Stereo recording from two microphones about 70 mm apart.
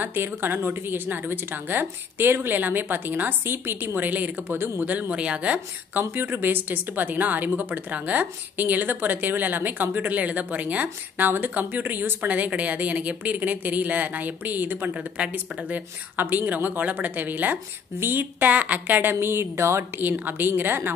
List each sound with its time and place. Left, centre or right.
0.0 s speech: right
15.0 s speech: centre; by 20.9 s right